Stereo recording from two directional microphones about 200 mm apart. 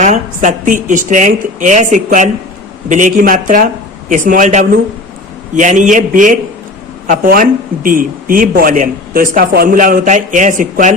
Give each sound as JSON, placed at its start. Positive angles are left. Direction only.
{"t": 0.0, "sound": "a woman's voice", "side_deg": -40}